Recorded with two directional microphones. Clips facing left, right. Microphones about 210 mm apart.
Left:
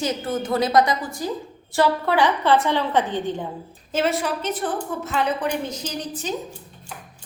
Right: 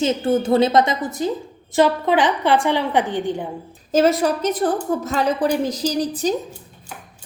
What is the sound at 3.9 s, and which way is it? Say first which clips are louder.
A woman's voice: right 6 dB; 40° right (ahead or behind).